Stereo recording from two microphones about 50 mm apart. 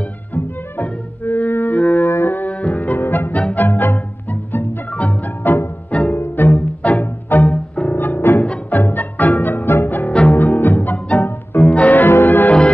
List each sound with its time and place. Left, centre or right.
0.3 s music: left
2.0 s brass instrument: left
2.6 s music: left
5.4 s music: left
5.9 s music: left
6.1 s music: left
7.5 s music: left
7.9 s music: left
12.1 s bell: left